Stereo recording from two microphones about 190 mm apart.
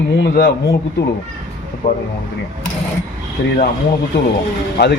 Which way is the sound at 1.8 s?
55° left (ahead or behind).